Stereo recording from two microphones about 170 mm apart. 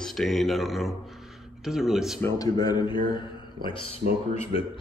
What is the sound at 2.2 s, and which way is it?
Speech, 20° left (ahead or behind).